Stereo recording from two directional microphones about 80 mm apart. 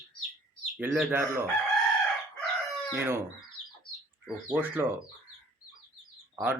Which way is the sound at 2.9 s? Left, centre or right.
Right.